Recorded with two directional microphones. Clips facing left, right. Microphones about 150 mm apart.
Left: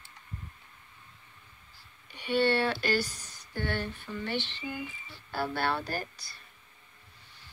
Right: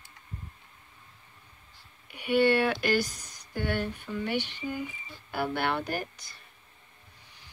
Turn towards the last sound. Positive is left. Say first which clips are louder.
# right 2 dB
turn(degrees=-20)  # may be behind; listen again after turning